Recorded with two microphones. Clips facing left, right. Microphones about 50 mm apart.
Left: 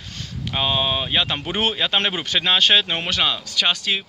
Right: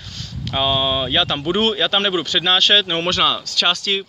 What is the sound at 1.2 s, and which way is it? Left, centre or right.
Speech, left.